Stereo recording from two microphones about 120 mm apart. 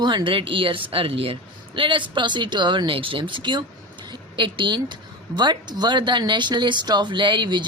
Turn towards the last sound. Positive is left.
turn(degrees=-40)  # may be behind; listen again after turning